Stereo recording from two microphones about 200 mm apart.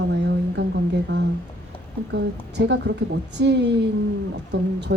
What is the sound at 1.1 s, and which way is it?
A woman's voice, 55° right (ahead or behind).